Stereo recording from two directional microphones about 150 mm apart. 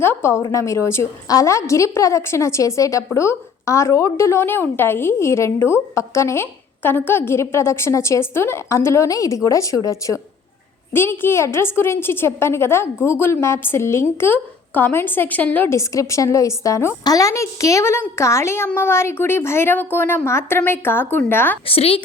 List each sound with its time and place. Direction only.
0.0 s a woman's voice: 15° left (ahead or behind)
10.9 s a woman's voice: 15° left (ahead or behind)
21.7 s a woman's voice: 40° left (ahead or behind)